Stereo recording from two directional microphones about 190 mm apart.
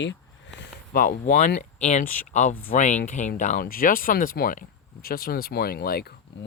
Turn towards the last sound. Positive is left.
turn(degrees=55)  # may be behind; listen again after turning